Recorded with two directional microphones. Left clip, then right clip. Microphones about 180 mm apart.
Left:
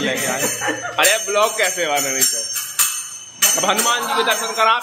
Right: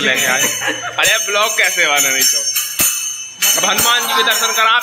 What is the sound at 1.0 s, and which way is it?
Jingle bell, 5° left (ahead or behind).